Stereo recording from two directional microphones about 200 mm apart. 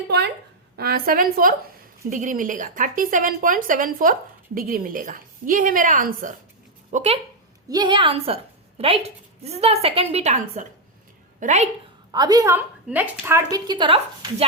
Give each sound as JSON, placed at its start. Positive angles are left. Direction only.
{"t": 0.8, "sound": "a woman's voice", "side_deg": -50}
{"t": 7.7, "sound": "a woman's voice", "side_deg": -20}
{"t": 12.1, "sound": "a woman's voice", "side_deg": -20}